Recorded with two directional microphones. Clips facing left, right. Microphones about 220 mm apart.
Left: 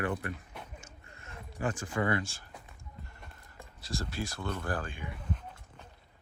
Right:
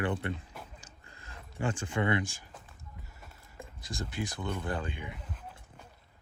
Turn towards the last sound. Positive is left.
turn(degrees=-20)  # may be behind; listen again after turning